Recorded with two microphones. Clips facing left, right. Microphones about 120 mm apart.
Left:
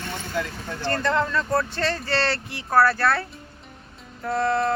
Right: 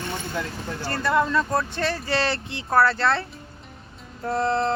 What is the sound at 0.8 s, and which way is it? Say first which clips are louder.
Speech: even; 10° right (ahead or behind).